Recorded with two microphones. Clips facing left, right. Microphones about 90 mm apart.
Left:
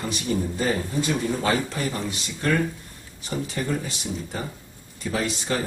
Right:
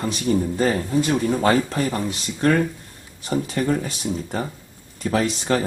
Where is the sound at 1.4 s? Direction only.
45° right (ahead or behind).